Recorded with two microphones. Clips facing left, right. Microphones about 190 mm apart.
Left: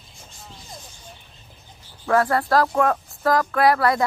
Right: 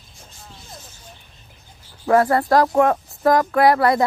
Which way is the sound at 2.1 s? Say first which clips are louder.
Right 3 dB; 25° right (ahead or behind).